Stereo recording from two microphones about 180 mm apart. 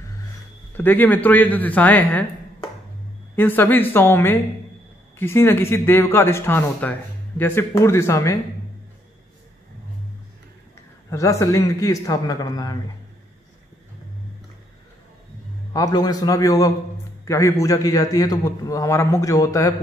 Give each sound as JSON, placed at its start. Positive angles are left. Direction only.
{"t": 0.7, "sound": "a man's voice", "side_deg": 10}
{"t": 3.3, "sound": "a man's voice", "side_deg": 10}
{"t": 11.1, "sound": "a man's voice", "side_deg": 15}
{"t": 15.7, "sound": "a man's voice", "side_deg": 20}